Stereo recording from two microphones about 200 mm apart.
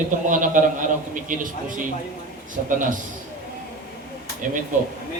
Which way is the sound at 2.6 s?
40° right (ahead or behind).